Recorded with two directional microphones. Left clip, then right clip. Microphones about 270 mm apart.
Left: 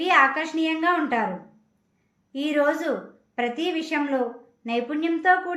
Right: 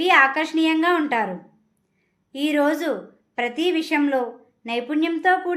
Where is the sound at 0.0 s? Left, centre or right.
Right.